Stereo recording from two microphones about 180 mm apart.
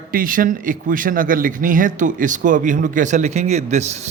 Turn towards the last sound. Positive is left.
turn(degrees=-40)  # may be behind; listen again after turning